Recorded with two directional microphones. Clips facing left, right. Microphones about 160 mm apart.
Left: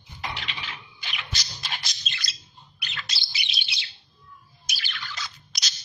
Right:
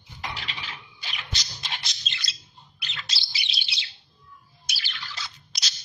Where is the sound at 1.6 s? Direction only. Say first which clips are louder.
Left 1 dB; 25° right (ahead or behind).